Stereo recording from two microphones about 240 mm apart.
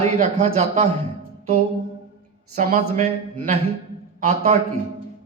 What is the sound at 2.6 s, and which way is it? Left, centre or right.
Speech, right.